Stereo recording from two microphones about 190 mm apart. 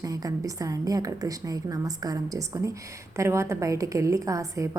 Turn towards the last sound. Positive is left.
turn(degrees=-15)  # may be behind; listen again after turning